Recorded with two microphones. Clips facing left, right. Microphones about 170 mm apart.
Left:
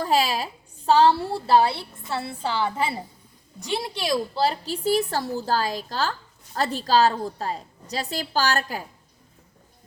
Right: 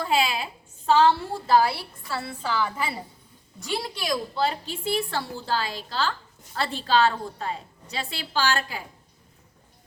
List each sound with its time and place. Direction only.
0.0 s a woman's voice: 40° left (ahead or behind)